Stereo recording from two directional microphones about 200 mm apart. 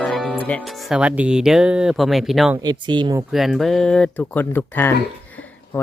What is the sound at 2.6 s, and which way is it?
Speech, 20° right (ahead or behind).